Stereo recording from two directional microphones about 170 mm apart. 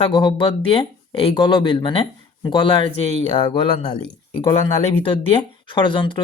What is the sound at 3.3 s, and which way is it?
Speech, 25° left (ahead or behind).